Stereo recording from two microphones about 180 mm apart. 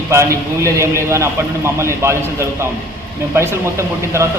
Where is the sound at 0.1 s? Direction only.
15° right (ahead or behind).